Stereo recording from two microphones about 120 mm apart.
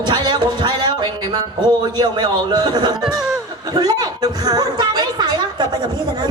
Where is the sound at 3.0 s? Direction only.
5° right (ahead or behind).